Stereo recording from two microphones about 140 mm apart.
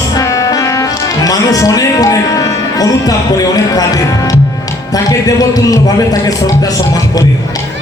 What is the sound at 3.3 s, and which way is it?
A man's voice, 25° left (ahead or behind).